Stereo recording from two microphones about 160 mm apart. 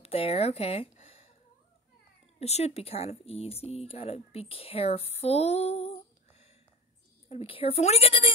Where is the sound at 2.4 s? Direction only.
40° left (ahead or behind).